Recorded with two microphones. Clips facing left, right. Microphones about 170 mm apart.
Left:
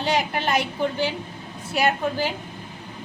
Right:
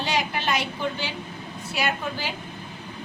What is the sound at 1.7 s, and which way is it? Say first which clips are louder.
Speech: left 5 dB; 50° left (ahead or behind).